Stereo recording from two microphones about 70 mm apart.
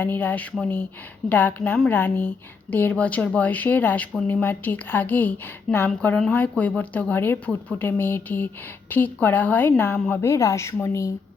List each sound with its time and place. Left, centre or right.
0.0 s a woman's voice: left
10.2 s speech: left